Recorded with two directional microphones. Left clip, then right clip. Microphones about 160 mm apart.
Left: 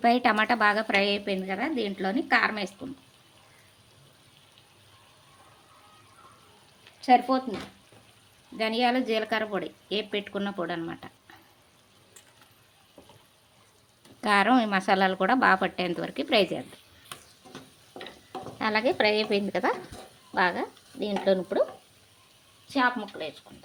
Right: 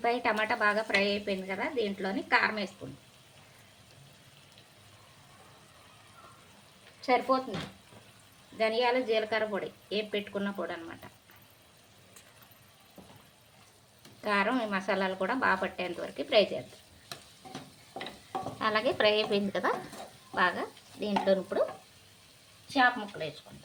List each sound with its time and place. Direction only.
0.0 s a woman's voice: 90° left
7.0 s speech: 90° left
8.5 s a woman's voice: 90° left
14.2 s a woman's voice: 90° left
18.6 s speech: 40° left (ahead or behind)
20.3 s stir: 35° left (ahead or behind)
22.7 s a woman's voice: 45° left (ahead or behind)